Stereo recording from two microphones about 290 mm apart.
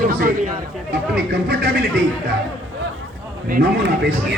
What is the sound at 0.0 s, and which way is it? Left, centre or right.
Speech, right.